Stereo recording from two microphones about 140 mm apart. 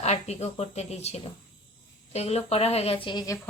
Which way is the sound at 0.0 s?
50° left (ahead or behind).